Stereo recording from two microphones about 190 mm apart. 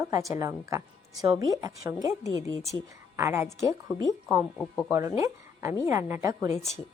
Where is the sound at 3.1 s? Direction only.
15° right (ahead or behind).